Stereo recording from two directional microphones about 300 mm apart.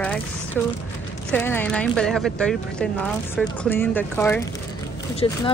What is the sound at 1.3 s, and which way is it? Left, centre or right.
Speech, centre.